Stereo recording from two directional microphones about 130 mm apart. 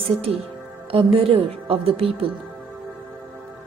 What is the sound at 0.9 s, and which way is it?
A woman's voice, 45° right (ahead or behind).